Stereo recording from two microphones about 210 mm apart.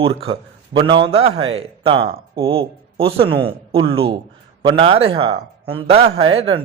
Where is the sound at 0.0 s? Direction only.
25° right (ahead or behind).